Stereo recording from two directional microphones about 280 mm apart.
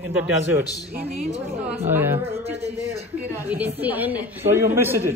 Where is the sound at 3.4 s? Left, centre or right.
Centre.